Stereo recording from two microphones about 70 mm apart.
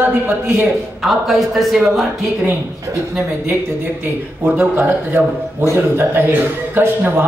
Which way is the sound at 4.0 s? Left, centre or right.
Right.